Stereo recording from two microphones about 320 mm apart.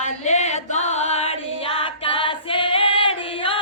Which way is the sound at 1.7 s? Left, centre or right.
Centre.